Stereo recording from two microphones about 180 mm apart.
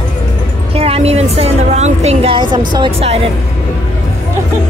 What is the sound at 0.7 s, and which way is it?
A woman's voice, 35° right (ahead or behind).